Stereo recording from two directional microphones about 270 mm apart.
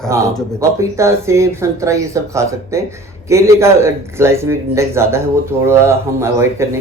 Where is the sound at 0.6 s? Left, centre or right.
Centre.